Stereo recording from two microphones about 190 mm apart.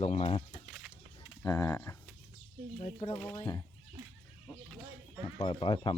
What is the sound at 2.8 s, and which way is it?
Speech, 30° left (ahead or behind).